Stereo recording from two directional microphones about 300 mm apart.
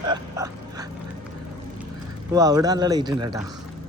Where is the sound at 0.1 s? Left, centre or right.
Centre.